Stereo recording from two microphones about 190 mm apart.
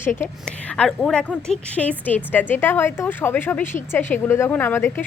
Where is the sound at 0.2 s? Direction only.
5° left (ahead or behind).